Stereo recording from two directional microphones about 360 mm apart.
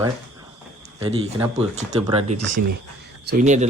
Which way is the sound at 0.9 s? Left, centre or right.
Centre.